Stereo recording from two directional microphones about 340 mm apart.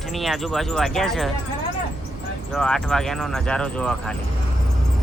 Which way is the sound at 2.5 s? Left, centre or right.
Centre.